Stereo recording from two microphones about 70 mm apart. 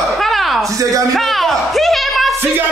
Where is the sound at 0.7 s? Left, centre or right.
Right.